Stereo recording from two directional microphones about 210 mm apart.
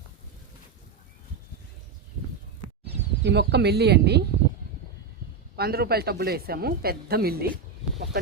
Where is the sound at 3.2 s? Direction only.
50° right (ahead or behind).